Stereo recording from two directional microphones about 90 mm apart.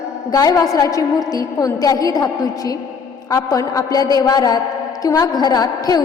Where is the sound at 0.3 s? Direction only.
40° left (ahead or behind).